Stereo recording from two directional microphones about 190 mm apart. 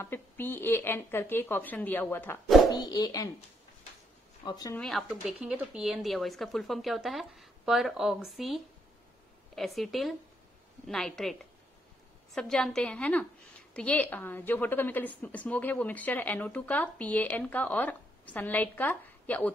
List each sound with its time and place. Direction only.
0.0 s a woman's voice: 10° left (ahead or behind)
4.5 s speech: 20° left (ahead or behind)
4.7 s speech: centre (ahead or behind)
12.4 s a woman's voice: 5° left (ahead or behind)